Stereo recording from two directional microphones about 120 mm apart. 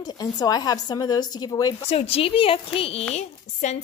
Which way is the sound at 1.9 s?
55° left (ahead or behind).